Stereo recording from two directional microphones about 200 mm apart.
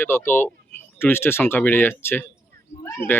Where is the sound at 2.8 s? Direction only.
10° left (ahead or behind).